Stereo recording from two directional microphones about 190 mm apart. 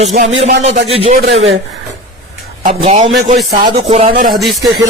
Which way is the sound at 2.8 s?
30° right (ahead or behind).